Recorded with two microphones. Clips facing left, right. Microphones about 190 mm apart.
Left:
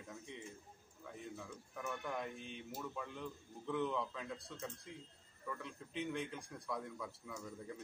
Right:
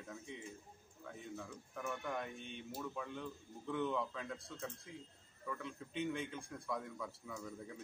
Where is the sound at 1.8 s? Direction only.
Centre (ahead or behind).